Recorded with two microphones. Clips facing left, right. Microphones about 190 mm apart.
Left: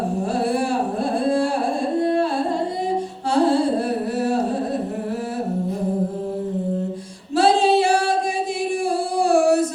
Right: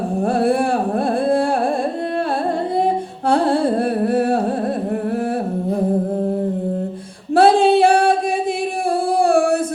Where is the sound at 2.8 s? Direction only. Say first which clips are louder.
Right 4 dB; 55° right (ahead or behind).